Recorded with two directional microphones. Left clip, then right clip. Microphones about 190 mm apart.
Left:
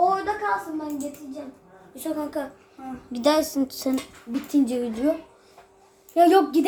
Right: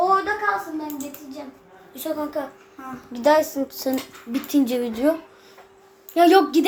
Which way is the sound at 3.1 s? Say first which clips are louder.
Right 4 dB; 60° left (ahead or behind).